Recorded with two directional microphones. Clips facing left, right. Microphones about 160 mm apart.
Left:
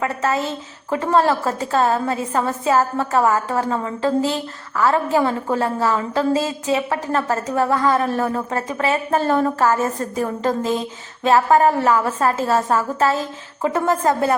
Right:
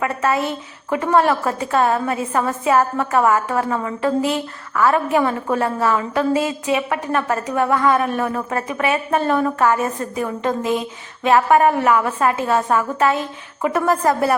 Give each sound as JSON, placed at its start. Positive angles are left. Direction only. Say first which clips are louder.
{"t": 0.0, "sound": "a woman's voice", "louder": "right 1 dB", "side_deg": 25}